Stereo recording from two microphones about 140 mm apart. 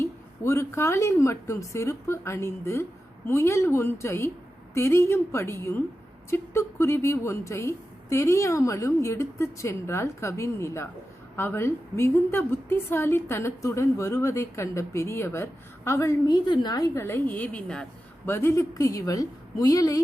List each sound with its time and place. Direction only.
0.0 s a woman's voice: 20° left (ahead or behind)
18.3 s a woman's voice: 20° left (ahead or behind)